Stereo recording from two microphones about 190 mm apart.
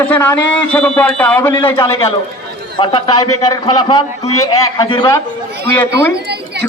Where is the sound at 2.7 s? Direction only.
25° left (ahead or behind).